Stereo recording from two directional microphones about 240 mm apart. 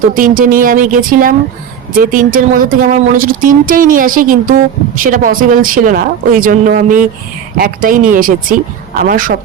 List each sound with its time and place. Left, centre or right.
0.1 s speech: right